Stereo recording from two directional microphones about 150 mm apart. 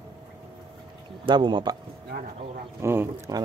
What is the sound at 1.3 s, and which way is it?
Speech, 30° right (ahead or behind).